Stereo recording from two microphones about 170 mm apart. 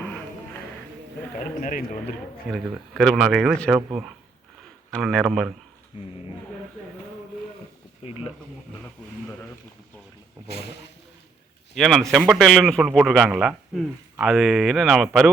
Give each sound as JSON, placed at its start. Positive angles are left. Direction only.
{"t": 1.6, "sound": "speech", "side_deg": 50}
{"t": 2.5, "sound": "a man's voice", "side_deg": 0}
{"t": 4.9, "sound": "a man's voice", "side_deg": 0}
{"t": 5.9, "sound": "speech", "side_deg": 30}
{"t": 8.0, "sound": "speech", "side_deg": 35}
{"t": 11.7, "sound": "a man's voice", "side_deg": 0}